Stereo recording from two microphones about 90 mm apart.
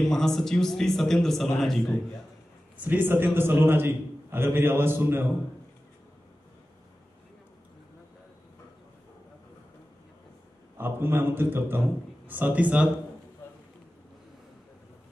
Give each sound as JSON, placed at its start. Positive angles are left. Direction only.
{"t": 0.0, "sound": "a man's voice", "side_deg": 5}
{"t": 2.8, "sound": "a man's voice", "side_deg": -20}
{"t": 10.8, "sound": "a man's voice", "side_deg": -25}